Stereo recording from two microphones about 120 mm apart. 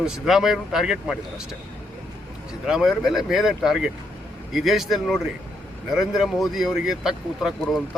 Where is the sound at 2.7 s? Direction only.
Centre (ahead or behind).